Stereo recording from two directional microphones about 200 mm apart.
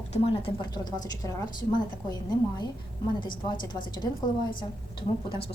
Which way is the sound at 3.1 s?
25° left (ahead or behind).